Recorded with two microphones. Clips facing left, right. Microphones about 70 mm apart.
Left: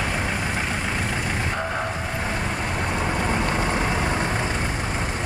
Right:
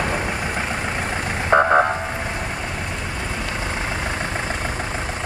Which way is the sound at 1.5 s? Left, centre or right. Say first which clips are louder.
Right 12 dB; right.